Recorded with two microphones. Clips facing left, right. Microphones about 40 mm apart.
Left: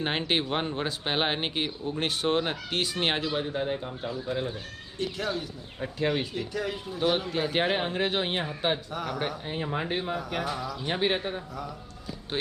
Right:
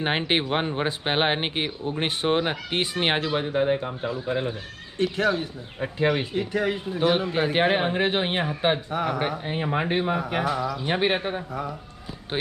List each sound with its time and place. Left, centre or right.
0.0 s speech: right
6.0 s speech: right
7.0 s speech: right